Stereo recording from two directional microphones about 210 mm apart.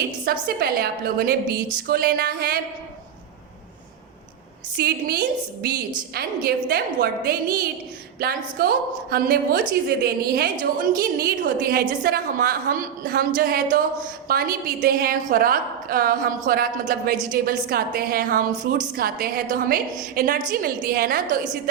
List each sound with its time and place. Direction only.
0.3 s a woman's voice: 45° right (ahead or behind)
4.8 s a woman's voice: 45° right (ahead or behind)
6.1 s a woman's voice: 45° right (ahead or behind)